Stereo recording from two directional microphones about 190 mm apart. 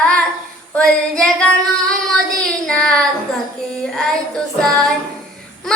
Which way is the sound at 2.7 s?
5° left (ahead or behind).